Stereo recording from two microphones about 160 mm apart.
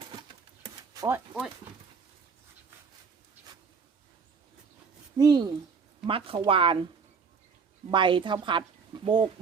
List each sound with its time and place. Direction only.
0.0 s a sound: 35° right (ahead or behind)
0.9 s speech: 15° right (ahead or behind)
5.1 s a woman's voice: 25° right (ahead or behind)
7.9 s a woman's voice: 30° right (ahead or behind)